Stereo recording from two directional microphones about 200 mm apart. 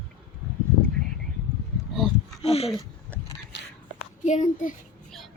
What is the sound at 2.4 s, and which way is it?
Speech, 30° left (ahead or behind).